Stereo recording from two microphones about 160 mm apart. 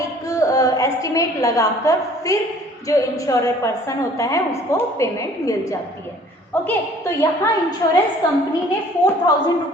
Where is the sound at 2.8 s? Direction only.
20° left (ahead or behind).